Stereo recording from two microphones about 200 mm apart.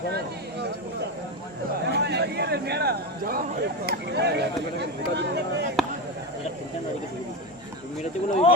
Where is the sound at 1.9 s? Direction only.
55° right (ahead or behind).